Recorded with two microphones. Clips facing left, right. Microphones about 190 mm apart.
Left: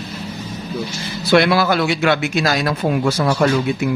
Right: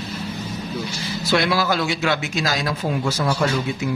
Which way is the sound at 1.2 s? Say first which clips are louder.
Left 6 dB; 65° left (ahead or behind).